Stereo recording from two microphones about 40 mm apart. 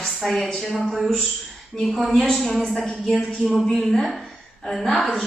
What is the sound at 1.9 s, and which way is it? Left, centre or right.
A woman's voice, centre.